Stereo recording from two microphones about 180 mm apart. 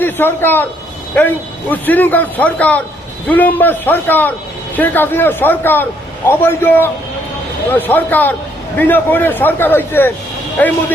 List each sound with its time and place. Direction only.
0.0 s a man's voice: 10° left (ahead or behind)
1.7 s a man's voice: 10° left (ahead or behind)